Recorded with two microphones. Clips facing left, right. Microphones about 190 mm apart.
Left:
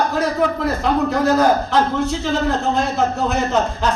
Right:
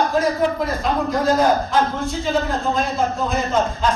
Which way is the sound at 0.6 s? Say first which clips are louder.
Left 3 dB; 70° left (ahead or behind).